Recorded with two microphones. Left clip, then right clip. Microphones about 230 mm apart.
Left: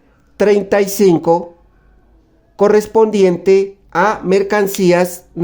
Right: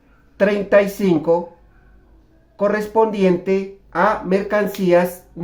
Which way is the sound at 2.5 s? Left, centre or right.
Left.